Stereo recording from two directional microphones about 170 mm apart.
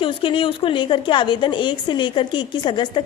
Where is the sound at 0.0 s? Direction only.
30° left (ahead or behind).